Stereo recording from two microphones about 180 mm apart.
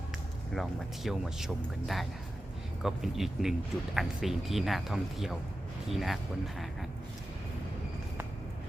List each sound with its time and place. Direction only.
0.5 s speech: centre (ahead or behind)